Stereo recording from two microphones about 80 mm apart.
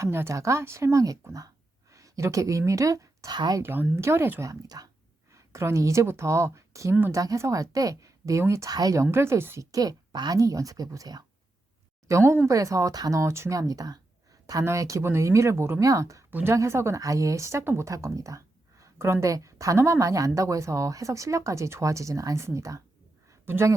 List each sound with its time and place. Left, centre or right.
0.0 s speech: right
3.3 s speech: right
3.6 s speech: right
4.7 s speech: right
5.3 s a woman's voice: right
9.1 s speech: right
9.7 s speech: right
12.0 s speech: right
13.6 s speech: right
14.6 s speech: right
15.8 s speech: right
16.3 s speech: right
23.3 s a sound: right